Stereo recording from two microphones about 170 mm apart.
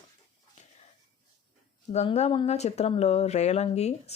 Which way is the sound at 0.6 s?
45° left (ahead or behind).